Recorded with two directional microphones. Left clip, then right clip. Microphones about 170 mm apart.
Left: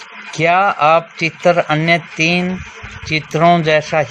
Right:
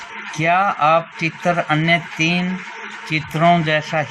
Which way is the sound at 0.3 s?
60° left (ahead or behind).